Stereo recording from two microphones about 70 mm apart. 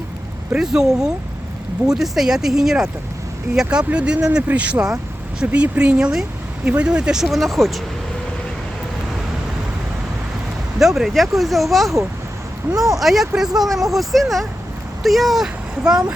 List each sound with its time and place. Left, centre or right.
0.6 s speech: centre
10.8 s speech: centre